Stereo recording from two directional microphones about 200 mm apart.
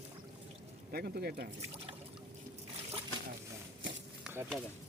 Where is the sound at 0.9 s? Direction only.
50° right (ahead or behind).